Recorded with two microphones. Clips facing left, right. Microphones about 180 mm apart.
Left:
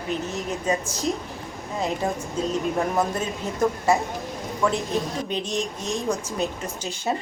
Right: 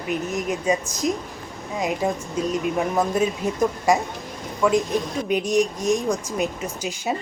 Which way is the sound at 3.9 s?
15° right (ahead or behind).